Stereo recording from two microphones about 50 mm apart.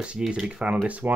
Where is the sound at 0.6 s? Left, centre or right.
Right.